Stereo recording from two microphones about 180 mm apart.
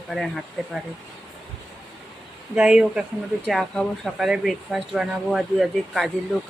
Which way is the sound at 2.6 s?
5° right (ahead or behind).